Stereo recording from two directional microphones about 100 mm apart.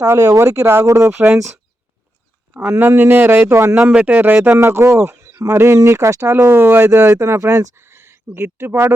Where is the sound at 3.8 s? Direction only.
10° right (ahead or behind).